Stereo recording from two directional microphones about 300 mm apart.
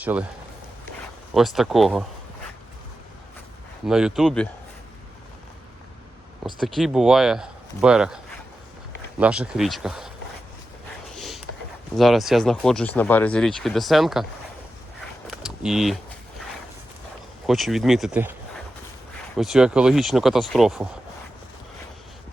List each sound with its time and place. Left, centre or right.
0.0 s speech: centre
1.3 s speech: centre
3.8 s speech: centre
6.4 s speech: centre
11.2 s a sound: centre
11.9 s speech: centre
15.3 s a sound: centre
17.4 s speech: centre
19.4 s speech: centre